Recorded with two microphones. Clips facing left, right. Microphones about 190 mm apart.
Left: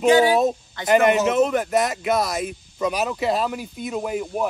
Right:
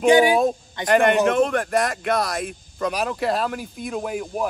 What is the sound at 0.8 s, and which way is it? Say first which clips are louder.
Speech: even; 5° left (ahead or behind).